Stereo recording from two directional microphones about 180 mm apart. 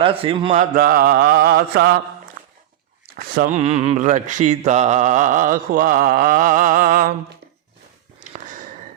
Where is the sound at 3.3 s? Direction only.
40° right (ahead or behind).